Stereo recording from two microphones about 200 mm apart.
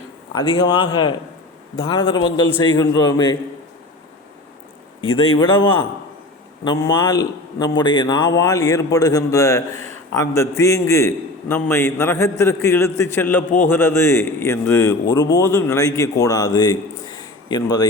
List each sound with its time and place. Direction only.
0.3 s a man's voice: 20° left (ahead or behind)
5.0 s a man's voice: 25° left (ahead or behind)